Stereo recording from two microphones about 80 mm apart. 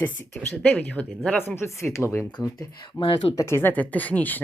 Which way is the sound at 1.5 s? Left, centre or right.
Left.